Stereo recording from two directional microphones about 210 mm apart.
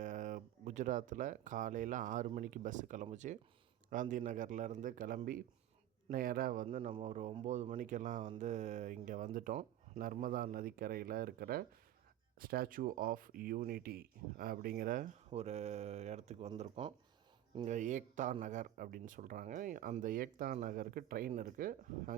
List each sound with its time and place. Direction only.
0.0 s speech: 35° right (ahead or behind)